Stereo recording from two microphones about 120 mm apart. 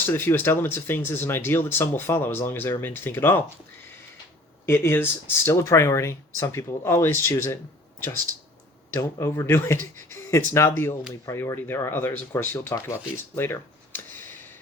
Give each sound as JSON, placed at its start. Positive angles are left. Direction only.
{"t": 0.1, "sound": "speech", "side_deg": 20}
{"t": 4.6, "sound": "speech", "side_deg": 20}
{"t": 8.9, "sound": "speech", "side_deg": 25}